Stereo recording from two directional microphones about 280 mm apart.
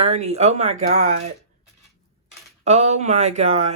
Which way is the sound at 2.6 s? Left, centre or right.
Right.